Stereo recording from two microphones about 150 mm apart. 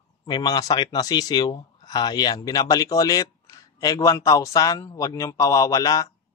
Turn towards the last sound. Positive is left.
turn(degrees=20)  # may be behind; listen again after turning